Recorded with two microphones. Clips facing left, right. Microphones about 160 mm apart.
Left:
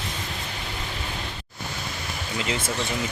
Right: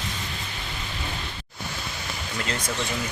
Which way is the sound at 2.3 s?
15° left (ahead or behind).